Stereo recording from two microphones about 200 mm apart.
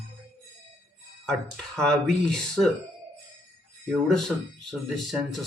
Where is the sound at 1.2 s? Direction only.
5° left (ahead or behind).